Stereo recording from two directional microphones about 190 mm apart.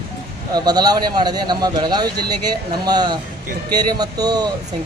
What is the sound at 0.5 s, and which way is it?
A man's voice, 20° right (ahead or behind).